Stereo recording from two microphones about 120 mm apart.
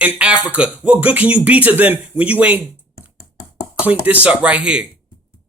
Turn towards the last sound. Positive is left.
turn(degrees=-10)  # may be behind; listen again after turning